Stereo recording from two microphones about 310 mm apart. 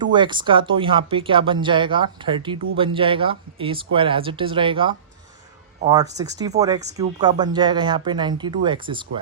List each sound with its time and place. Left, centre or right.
0.0 s speech: centre